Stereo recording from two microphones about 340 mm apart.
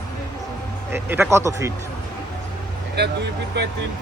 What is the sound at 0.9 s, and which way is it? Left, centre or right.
Speech, centre.